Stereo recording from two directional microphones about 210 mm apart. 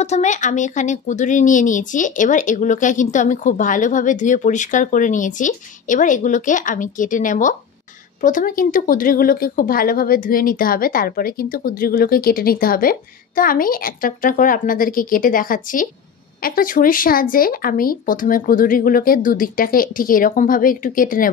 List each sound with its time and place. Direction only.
0.0 s speech: 35° left (ahead or behind)